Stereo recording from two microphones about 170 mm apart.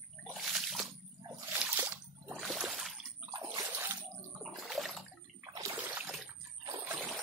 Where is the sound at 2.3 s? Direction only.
Centre (ahead or behind).